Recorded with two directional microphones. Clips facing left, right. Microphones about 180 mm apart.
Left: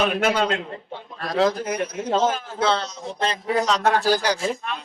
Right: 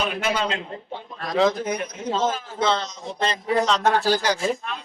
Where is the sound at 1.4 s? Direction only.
5° left (ahead or behind).